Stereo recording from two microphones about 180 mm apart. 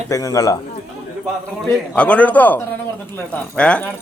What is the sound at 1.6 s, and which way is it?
Speech, 5° left (ahead or behind).